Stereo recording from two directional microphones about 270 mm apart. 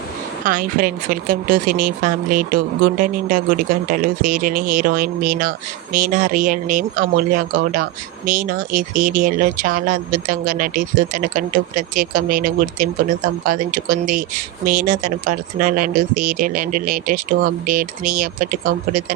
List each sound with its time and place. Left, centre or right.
0.4 s speech: right